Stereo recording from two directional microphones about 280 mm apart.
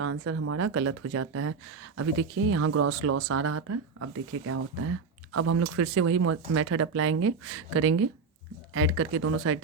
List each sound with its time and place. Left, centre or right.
0.0 s speech: right